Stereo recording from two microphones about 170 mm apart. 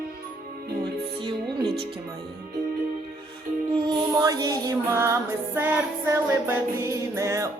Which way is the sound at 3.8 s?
25° right (ahead or behind).